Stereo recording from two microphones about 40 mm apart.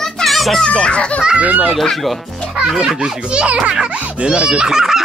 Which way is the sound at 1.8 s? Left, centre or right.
Centre.